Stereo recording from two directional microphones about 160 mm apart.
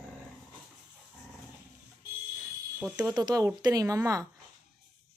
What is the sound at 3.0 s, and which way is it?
Speech, 25° right (ahead or behind).